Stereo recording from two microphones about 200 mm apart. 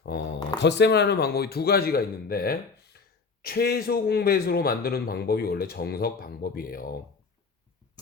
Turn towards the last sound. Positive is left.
turn(degrees=45)  # may be behind; listen again after turning